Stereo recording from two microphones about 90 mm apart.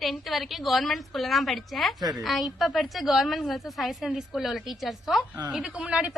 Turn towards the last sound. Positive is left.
turn(degrees=-10)  # may be behind; listen again after turning